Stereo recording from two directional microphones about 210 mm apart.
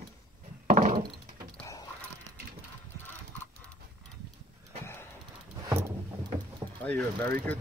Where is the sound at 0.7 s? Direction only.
40° right (ahead or behind).